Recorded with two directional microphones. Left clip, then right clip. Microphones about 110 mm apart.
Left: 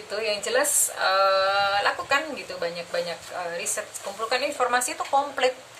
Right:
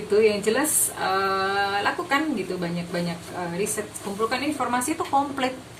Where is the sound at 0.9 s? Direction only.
40° left (ahead or behind).